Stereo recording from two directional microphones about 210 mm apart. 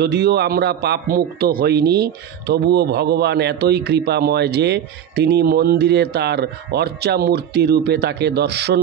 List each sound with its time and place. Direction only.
0.0 s a man's voice: 50° right (ahead or behind)